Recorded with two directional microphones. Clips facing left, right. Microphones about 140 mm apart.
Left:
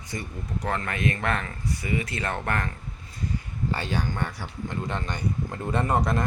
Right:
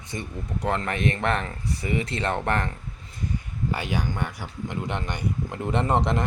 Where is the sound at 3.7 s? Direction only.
15° right (ahead or behind).